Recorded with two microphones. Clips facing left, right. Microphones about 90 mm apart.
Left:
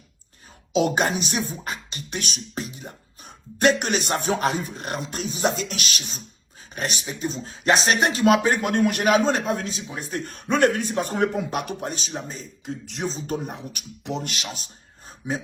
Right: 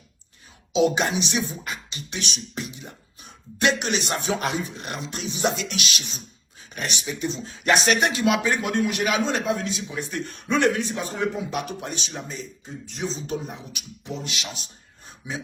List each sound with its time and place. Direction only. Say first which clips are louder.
0.7 s speech: even; 50° left (ahead or behind)
14.0 s speech: left 4 dB; 70° left (ahead or behind)
14.3 s speech: left 1 dB; 45° left (ahead or behind)